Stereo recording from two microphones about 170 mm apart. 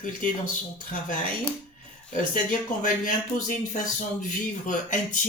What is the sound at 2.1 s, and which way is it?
Speech, 50° left (ahead or behind).